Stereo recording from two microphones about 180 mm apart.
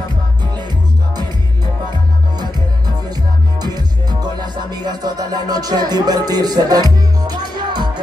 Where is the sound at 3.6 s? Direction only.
20° right (ahead or behind).